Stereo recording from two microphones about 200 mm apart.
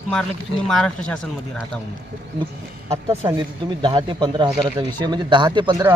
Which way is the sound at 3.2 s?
15° right (ahead or behind).